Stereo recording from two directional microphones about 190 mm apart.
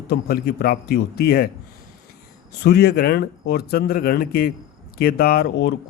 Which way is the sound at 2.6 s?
60° left (ahead or behind).